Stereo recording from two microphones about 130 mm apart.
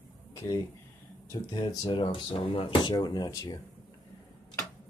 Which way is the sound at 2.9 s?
30° left (ahead or behind).